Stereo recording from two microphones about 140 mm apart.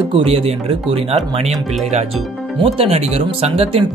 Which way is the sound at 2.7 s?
45° right (ahead or behind).